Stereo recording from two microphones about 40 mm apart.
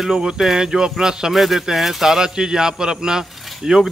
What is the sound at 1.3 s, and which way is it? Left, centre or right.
Speech, centre.